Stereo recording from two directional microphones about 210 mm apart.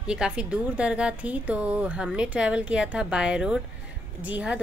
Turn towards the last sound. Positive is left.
turn(degrees=-5)  # may be behind; listen again after turning